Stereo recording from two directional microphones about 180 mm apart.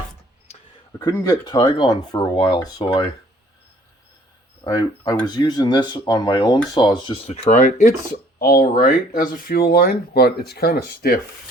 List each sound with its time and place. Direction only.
1.0 s speech: 20° left (ahead or behind)
4.6 s speech: 20° left (ahead or behind); by 11.2 s 55° left (ahead or behind)